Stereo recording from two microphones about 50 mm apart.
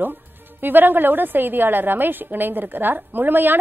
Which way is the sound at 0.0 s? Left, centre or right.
Right.